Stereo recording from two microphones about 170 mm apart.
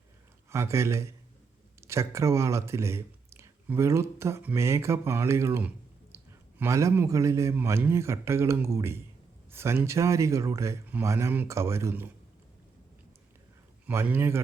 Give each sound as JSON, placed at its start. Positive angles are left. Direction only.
{"t": 0.5, "sound": "speech", "side_deg": -15}
{"t": 13.8, "sound": "speech", "side_deg": -15}